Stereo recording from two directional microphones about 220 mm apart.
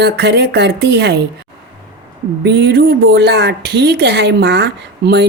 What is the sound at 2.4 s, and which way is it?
Speech, 50° right (ahead or behind).